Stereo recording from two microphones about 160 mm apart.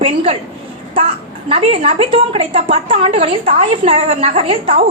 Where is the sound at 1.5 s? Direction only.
35° right (ahead or behind).